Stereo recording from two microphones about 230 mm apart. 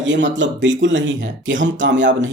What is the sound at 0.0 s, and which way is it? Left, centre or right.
Speech, right.